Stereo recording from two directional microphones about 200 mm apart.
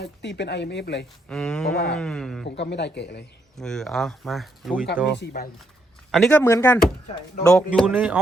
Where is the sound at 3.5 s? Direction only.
Centre (ahead or behind).